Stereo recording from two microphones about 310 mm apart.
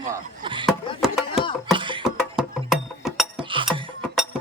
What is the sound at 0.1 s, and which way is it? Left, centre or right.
Speech, centre.